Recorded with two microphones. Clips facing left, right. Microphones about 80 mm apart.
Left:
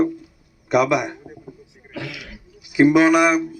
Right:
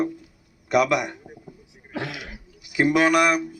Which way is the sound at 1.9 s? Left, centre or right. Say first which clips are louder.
Right 1 dB; right.